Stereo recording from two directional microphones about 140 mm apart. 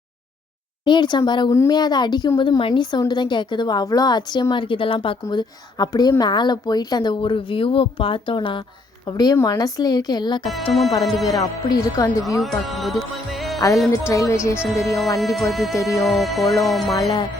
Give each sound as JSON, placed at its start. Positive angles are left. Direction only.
{"t": 0.9, "sound": "a woman's voice", "side_deg": 35}
{"t": 10.5, "sound": "speech", "side_deg": 0}
{"t": 11.3, "sound": "a woman's voice", "side_deg": 25}
{"t": 12.4, "sound": "music", "side_deg": 0}
{"t": 14.1, "sound": "a woman's voice", "side_deg": 20}
{"t": 14.5, "sound": "speech", "side_deg": -10}
{"t": 15.7, "sound": "a woman's voice", "side_deg": 25}
{"t": 16.0, "sound": "speech", "side_deg": 0}